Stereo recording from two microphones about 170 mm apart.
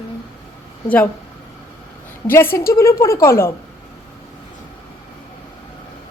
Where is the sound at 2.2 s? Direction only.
15° left (ahead or behind).